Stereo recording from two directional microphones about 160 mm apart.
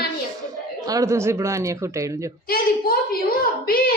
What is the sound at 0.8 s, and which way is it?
A woman's voice, 20° right (ahead or behind).